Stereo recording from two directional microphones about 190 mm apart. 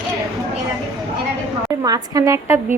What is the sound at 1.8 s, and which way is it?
Speech, 20° right (ahead or behind).